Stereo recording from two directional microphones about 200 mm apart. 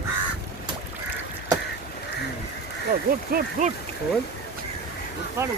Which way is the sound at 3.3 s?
45° right (ahead or behind).